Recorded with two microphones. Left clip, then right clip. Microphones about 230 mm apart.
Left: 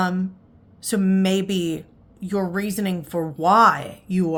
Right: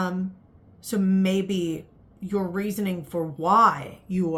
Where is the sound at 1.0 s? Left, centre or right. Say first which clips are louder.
Left 3 dB; left.